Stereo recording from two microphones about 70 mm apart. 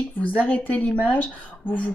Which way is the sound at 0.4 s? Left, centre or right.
Left.